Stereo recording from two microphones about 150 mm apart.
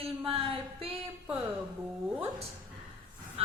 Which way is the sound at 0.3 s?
40° right (ahead or behind).